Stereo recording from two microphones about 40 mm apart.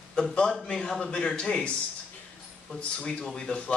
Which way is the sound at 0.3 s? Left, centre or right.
Centre.